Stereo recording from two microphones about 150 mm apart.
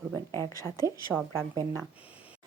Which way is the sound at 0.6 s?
20° right (ahead or behind).